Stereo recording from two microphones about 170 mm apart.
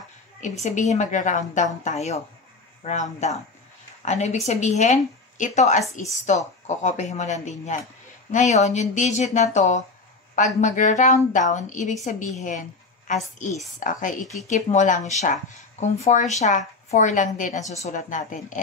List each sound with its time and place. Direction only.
0.4 s a woman's voice: 45° left (ahead or behind)
14.2 s speech: centre (ahead or behind)
14.5 s speech: 45° left (ahead or behind)